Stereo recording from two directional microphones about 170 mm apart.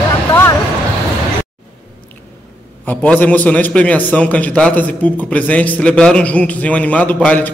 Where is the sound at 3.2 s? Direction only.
10° left (ahead or behind).